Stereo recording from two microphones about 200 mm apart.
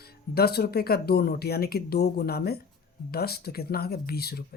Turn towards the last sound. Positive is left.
turn(degrees=50)  # may be behind; listen again after turning